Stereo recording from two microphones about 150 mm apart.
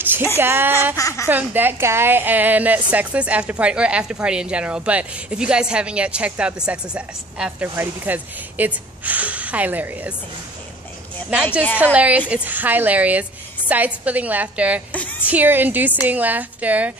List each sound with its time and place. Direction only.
0.0 s a sound: 15° right (ahead or behind)
0.4 s a woman's voice: 15° right (ahead or behind)
0.9 s speech: 20° left (ahead or behind)
1.3 s a woman's voice: 10° right (ahead or behind)
11.8 s a woman's voice: 10° right (ahead or behind)
14.9 s music: 10° left (ahead or behind)
15.2 s a woman's voice: 10° right (ahead or behind)